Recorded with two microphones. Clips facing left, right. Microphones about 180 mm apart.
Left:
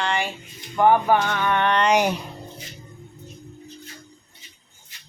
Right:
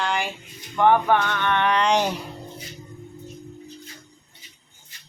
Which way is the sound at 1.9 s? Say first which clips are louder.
Left 2 dB; 15° left (ahead or behind).